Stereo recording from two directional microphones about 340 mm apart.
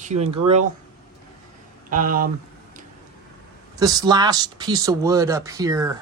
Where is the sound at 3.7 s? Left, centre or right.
Centre.